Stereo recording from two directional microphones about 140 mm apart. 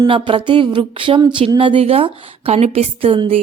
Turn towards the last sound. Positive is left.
turn(degrees=-40)  # may be behind; listen again after turning